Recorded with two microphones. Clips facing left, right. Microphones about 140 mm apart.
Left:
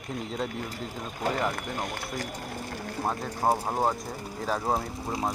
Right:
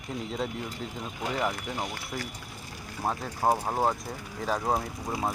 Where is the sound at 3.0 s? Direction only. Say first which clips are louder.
Even; 5° right (ahead or behind).